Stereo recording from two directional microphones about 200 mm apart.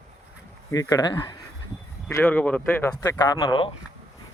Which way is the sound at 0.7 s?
20° left (ahead or behind).